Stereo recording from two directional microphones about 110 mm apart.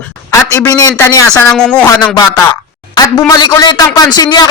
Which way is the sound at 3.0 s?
35° left (ahead or behind).